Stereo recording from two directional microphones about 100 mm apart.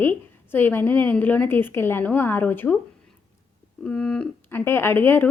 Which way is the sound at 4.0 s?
10° left (ahead or behind).